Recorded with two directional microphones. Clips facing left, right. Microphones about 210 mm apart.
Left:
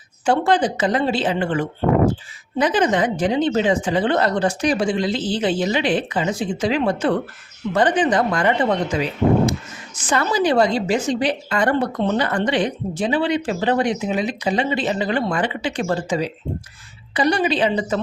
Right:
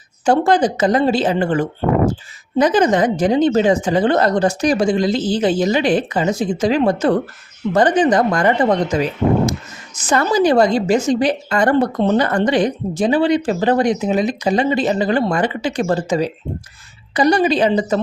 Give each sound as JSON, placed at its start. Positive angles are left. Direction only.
{"t": 0.3, "sound": "speech", "side_deg": -40}